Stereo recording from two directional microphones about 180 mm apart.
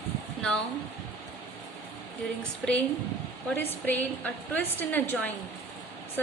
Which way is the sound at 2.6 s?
5° left (ahead or behind).